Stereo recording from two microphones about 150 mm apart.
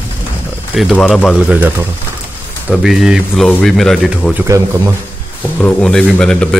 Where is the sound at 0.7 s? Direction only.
5° left (ahead or behind).